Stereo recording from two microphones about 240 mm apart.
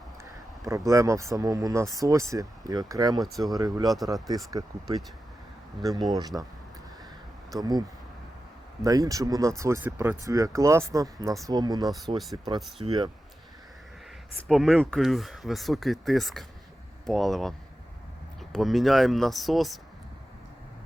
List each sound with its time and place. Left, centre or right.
0.6 s speech: centre
7.5 s speech: centre
12.0 s speech: centre
12.8 s speech: centre
14.4 s speech: centre
18.5 s speech: centre